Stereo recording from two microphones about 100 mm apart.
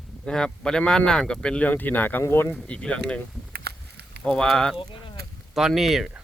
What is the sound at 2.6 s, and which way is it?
Speech, 10° left (ahead or behind).